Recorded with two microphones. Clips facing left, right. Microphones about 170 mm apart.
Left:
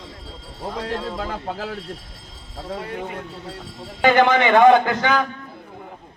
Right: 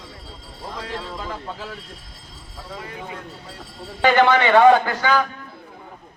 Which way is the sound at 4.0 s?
20° left (ahead or behind).